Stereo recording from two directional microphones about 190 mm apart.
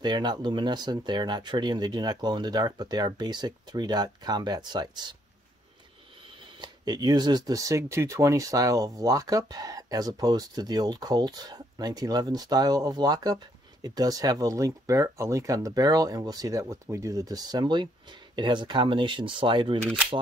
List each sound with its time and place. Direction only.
0.0 s speech: 25° right (ahead or behind)
6.6 s speech: 20° right (ahead or behind)